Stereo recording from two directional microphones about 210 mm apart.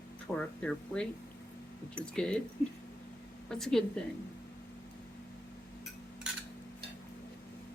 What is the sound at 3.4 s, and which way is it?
Speech, centre (ahead or behind).